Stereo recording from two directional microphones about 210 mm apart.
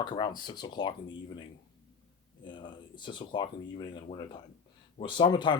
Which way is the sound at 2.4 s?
20° left (ahead or behind).